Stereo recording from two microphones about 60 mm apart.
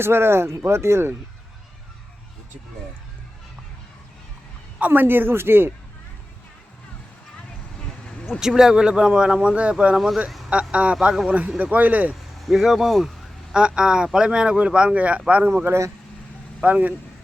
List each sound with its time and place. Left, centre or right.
0.0 s speech: right
4.9 s a man's voice: right
8.3 s speech: centre
11.1 s speech: centre
11.3 s speech: right
12.4 s speech: centre
13.5 s speech: centre
15.6 s speech: right
16.6 s speech: right